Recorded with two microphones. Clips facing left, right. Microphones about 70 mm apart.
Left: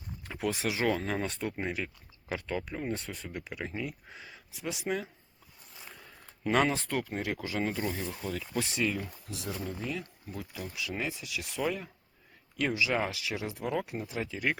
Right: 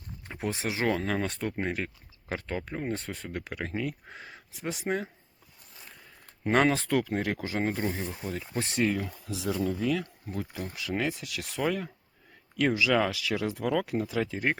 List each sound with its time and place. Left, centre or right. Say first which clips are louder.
0.3 s speech: even; right
0.8 s speech: right 4 dB; right
6.5 s speech: right 3 dB; right
6.7 s speech: right 6 dB; right
8.6 s speech: right 4 dB; right
10.4 s speech: right 2 dB; right
14.3 s speech: left 1 dB; right